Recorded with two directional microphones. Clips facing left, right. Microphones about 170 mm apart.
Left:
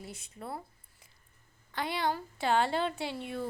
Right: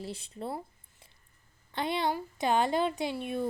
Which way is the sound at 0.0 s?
30° right (ahead or behind).